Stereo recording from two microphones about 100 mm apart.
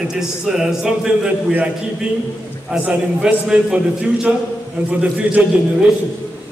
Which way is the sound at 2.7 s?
10° right (ahead or behind).